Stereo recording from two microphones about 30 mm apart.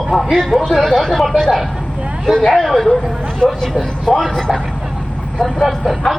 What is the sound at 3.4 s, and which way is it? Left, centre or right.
A man's voice, left.